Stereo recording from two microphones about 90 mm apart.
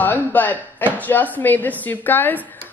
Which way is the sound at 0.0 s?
20° left (ahead or behind).